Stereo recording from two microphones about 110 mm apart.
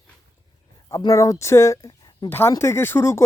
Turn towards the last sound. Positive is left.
turn(degrees=20)  # may be behind; listen again after turning